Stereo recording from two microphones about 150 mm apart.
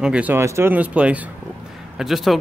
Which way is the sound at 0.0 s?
10° right (ahead or behind).